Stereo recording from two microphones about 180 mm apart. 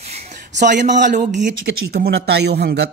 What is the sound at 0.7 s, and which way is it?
Speech, 45° right (ahead or behind).